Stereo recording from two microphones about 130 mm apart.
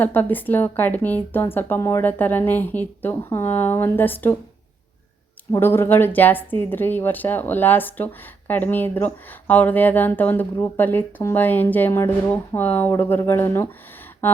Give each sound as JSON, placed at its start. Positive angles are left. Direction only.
{"t": 0.0, "sound": "speech", "side_deg": 15}
{"t": 5.5, "sound": "speech", "side_deg": 15}